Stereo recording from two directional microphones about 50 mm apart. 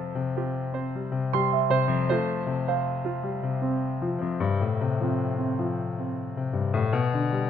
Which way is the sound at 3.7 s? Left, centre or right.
Centre.